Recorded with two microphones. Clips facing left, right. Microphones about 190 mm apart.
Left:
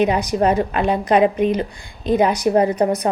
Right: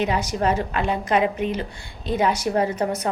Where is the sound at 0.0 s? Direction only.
15° left (ahead or behind).